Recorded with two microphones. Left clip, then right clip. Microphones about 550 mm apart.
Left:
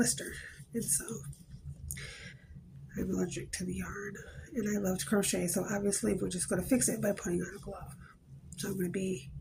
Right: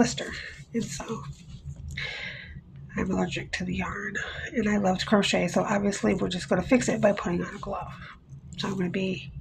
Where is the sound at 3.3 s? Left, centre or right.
Left.